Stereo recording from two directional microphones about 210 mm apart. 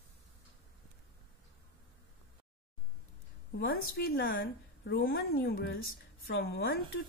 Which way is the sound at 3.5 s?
45° left (ahead or behind).